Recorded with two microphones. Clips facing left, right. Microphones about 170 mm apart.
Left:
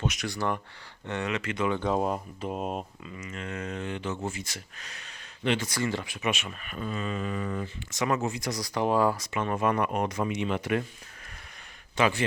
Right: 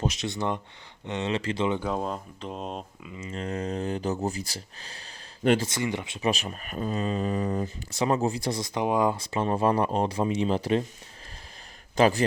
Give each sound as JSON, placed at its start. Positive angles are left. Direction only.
{"t": 0.0, "sound": "speech", "side_deg": -30}
{"t": 1.3, "sound": "speech", "side_deg": -30}
{"t": 2.0, "sound": "speech", "side_deg": 10}
{"t": 3.2, "sound": "speech", "side_deg": -30}
{"t": 5.6, "sound": "speech", "side_deg": -20}
{"t": 6.1, "sound": "speech", "side_deg": -35}
{"t": 11.9, "sound": "speech", "side_deg": -35}